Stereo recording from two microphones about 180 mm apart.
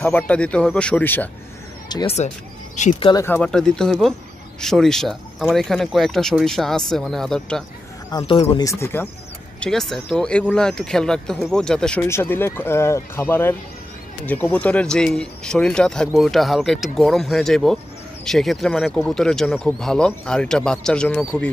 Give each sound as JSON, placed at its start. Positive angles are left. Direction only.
{"t": 0.0, "sound": "speech", "side_deg": 10}
{"t": 1.9, "sound": "speech", "side_deg": 25}
{"t": 2.1, "sound": "speech", "side_deg": 40}
{"t": 3.0, "sound": "speech", "side_deg": 25}
{"t": 3.3, "sound": "speech", "side_deg": 5}
{"t": 8.1, "sound": "speech", "side_deg": 25}
{"t": 8.6, "sound": "speech", "side_deg": 15}